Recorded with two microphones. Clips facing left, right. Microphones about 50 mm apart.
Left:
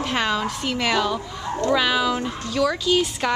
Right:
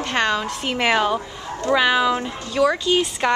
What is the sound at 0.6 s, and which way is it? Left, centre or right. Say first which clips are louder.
Speech: right 4 dB; right.